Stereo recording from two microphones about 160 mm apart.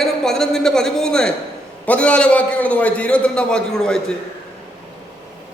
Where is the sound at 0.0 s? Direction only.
Centre (ahead or behind).